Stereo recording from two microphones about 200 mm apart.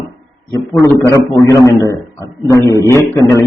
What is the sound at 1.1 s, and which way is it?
A man's voice, 15° left (ahead or behind).